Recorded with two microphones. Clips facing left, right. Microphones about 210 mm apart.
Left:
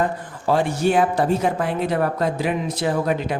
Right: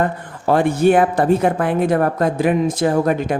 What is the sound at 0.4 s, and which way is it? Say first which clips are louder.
Speech: right 5 dB; 55° right (ahead or behind).